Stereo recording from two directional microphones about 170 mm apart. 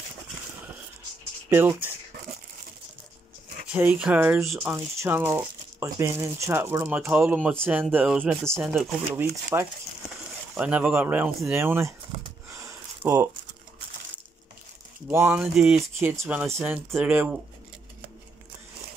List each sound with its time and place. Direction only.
1.5 s speech: 10° right (ahead or behind)
3.7 s speech: 10° right (ahead or behind)
12.5 s a sound: 15° right (ahead or behind)
15.0 s speech: 10° right (ahead or behind)